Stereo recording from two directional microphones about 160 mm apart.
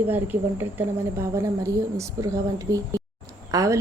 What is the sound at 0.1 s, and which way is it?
A woman's voice, 10° right (ahead or behind).